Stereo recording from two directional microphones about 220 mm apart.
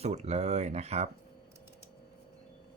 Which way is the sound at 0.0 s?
30° right (ahead or behind).